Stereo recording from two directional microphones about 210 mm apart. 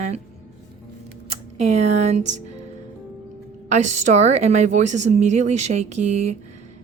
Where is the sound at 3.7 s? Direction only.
35° right (ahead or behind).